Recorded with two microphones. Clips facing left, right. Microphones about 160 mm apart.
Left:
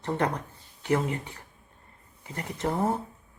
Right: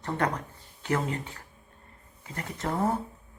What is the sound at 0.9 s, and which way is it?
Speech, 15° left (ahead or behind).